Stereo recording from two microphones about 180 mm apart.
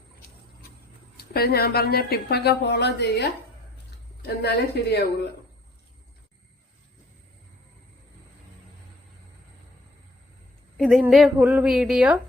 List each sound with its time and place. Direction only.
1.1 s speech: 60° left (ahead or behind)
10.8 s a woman's voice: centre (ahead or behind)